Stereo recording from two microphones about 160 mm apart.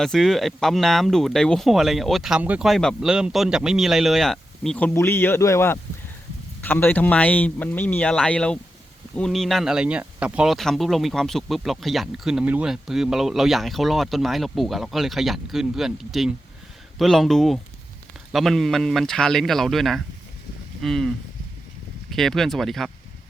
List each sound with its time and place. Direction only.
0.0 s speech: centre (ahead or behind)
4.9 s speech: 15° left (ahead or behind)
22.1 s speech: centre (ahead or behind)